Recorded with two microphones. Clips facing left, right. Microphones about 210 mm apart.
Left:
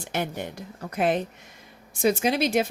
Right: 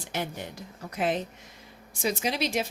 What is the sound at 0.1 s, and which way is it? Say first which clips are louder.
Speech: left 4 dB; 60° left (ahead or behind).